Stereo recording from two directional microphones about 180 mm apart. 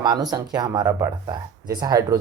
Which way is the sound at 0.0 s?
20° right (ahead or behind).